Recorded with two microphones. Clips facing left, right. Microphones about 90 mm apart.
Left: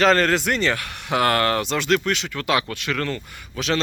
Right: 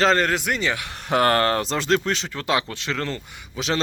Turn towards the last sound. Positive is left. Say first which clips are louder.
# left 1 dB
turn(degrees=-25)  # may be behind; listen again after turning